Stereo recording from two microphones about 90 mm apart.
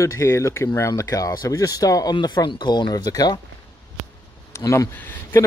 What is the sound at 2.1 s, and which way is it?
Speech, 55° left (ahead or behind).